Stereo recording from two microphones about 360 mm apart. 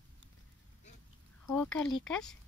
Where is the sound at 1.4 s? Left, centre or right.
Centre.